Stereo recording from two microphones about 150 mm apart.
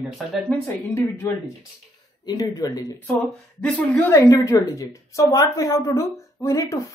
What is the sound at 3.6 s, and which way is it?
Speech, 10° left (ahead or behind).